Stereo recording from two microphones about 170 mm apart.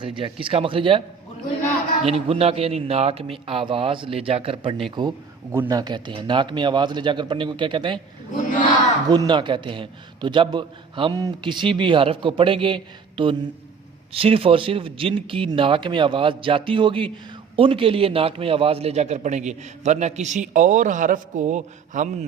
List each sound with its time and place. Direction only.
0.0 s speech: 30° right (ahead or behind)
2.0 s a man's voice: 35° right (ahead or behind)
9.0 s a man's voice: 25° right (ahead or behind); by 22.1 s 45° right (ahead or behind)